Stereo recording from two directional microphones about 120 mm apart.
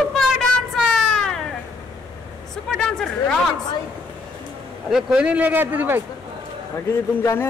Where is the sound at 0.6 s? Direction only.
Centre (ahead or behind).